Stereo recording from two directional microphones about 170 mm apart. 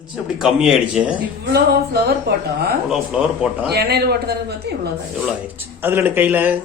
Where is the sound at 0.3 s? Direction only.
5° right (ahead or behind).